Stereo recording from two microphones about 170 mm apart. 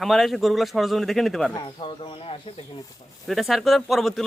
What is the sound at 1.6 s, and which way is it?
Speech, 30° left (ahead or behind).